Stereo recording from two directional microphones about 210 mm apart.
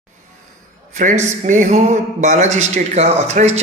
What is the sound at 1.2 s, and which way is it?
A man's voice, 35° right (ahead or behind).